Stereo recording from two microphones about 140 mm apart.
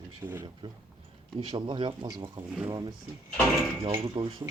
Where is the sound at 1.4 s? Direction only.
35° right (ahead or behind).